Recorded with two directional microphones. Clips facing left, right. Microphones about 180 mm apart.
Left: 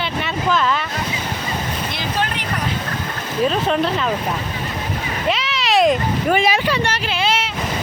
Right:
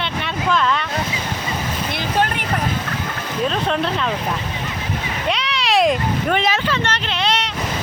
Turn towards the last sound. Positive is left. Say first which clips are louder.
# left 1 dB
turn(degrees=5)  # may be behind; listen again after turning